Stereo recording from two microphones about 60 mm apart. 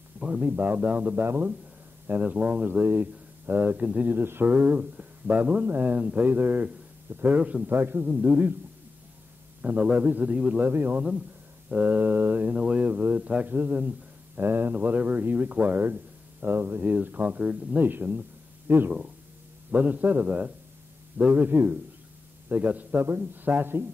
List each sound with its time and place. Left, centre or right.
0.2 s a sound: centre
0.5 s speech: right
0.7 s speech: right
2.8 s speech: right
4.1 s speech: right
9.6 s speech: right
10.6 s speech: right
13.7 s a sound: right
14.4 s speech: right
17.4 s speech: centre
17.8 s speech: right
19.7 s speech: right